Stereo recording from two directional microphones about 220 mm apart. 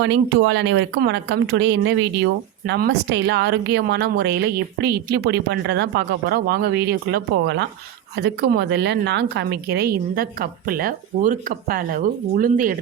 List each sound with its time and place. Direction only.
0.0 s a woman's voice: 55° right (ahead or behind); by 12.7 s 40° right (ahead or behind)